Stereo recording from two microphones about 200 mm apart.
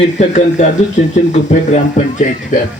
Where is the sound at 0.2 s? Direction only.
35° left (ahead or behind).